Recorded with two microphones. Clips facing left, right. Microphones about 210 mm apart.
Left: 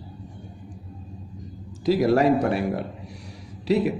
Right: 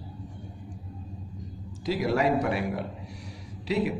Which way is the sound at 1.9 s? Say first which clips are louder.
Left 6 dB; 40° left (ahead or behind).